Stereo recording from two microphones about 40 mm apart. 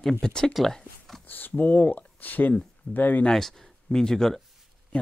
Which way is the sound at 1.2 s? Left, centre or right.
Left.